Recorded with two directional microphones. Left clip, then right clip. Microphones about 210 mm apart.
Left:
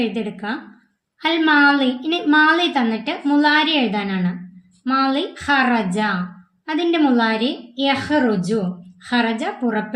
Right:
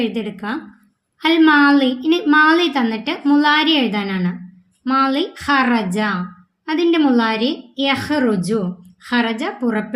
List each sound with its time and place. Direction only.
0.0 s a woman's voice: 25° right (ahead or behind)